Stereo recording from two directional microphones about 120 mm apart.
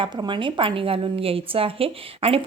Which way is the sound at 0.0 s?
40° right (ahead or behind).